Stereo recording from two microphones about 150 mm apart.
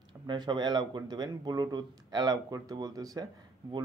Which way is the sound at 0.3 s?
30° right (ahead or behind).